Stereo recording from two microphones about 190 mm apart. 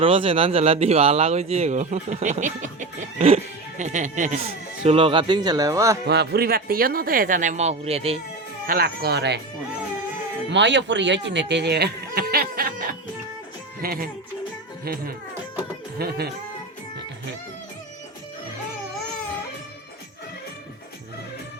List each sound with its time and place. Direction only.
0.0 s speech: 30° right (ahead or behind)
6.1 s speech: 60° right (ahead or behind); by 8.2 s 30° right (ahead or behind)
8.6 s speech: 50° right (ahead or behind)
10.5 s speech: 70° right (ahead or behind); by 14.1 s 50° right (ahead or behind)
16.0 s speech: 55° right (ahead or behind)